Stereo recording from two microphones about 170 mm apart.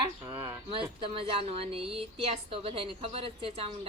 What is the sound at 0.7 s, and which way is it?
A woman's voice, 30° right (ahead or behind).